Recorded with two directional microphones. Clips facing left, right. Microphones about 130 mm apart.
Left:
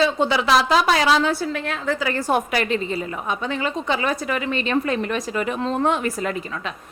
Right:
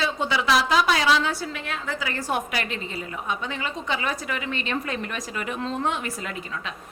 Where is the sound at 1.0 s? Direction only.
45° left (ahead or behind).